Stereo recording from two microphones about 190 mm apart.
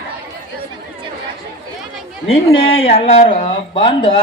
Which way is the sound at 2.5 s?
30° left (ahead or behind).